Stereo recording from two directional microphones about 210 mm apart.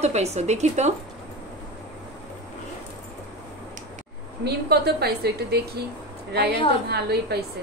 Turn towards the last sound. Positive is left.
turn(degrees=-50)  # may be behind; listen again after turning